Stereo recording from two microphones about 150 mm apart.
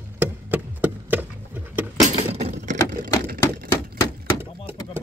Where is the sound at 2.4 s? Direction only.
55° right (ahead or behind).